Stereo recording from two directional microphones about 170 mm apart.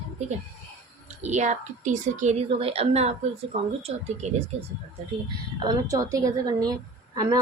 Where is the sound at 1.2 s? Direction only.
45° right (ahead or behind).